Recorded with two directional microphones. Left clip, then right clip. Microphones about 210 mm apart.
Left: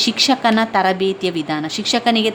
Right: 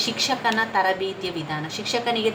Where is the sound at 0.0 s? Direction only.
55° left (ahead or behind).